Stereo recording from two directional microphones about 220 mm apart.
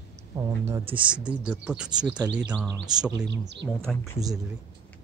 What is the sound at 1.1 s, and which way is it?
Speech, 5° right (ahead or behind).